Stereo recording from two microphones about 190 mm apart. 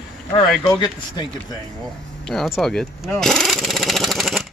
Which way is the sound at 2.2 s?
Centre (ahead or behind).